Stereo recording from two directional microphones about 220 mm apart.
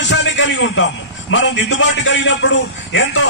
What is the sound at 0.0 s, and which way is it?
A man's voice, 55° left (ahead or behind).